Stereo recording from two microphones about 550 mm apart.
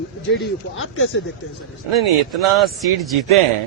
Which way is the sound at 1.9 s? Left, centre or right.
Right.